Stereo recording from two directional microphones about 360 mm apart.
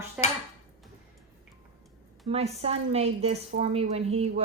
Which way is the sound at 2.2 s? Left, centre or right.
Centre.